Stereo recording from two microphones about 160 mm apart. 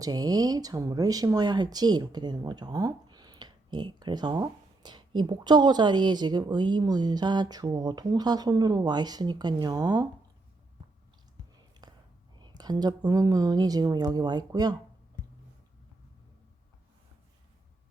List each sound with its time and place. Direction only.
0.0 s speech: 25° right (ahead or behind)
11.8 s whispering: 25° right (ahead or behind)
12.4 s speech: 25° right (ahead or behind)